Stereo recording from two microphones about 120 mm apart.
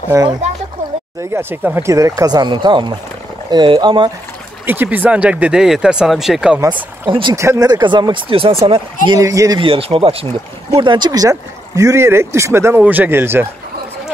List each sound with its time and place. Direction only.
0.1 s speech: 25° right (ahead or behind)
1.3 s speech: 20° right (ahead or behind); by 4.1 s 45° right (ahead or behind)
4.6 s speech: 15° right (ahead or behind)
6.7 s speech: 45° right (ahead or behind)
7.3 s speech: 25° right (ahead or behind)
7.7 s speech: 40° right (ahead or behind)
9.1 s speech: 30° right (ahead or behind)
9.6 s speech: 50° right (ahead or behind); by 13.5 s 20° right (ahead or behind)